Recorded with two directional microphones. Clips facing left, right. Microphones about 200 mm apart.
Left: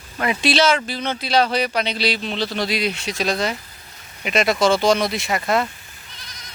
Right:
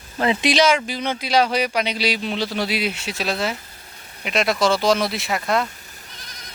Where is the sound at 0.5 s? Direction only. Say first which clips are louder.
Even; 10° right (ahead or behind).